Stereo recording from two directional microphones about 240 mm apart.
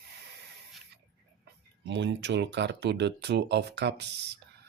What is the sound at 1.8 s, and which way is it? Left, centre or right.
Speech, right.